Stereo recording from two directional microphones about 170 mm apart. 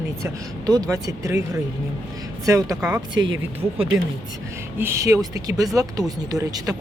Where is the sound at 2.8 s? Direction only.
5° right (ahead or behind).